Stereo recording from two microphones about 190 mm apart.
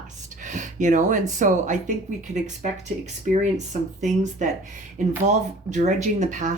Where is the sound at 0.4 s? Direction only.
40° right (ahead or behind).